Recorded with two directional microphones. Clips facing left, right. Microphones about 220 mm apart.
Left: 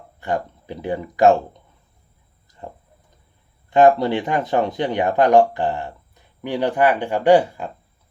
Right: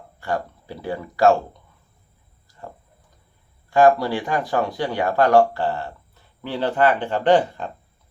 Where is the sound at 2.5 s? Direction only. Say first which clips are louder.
Left 3 dB; 20° left (ahead or behind).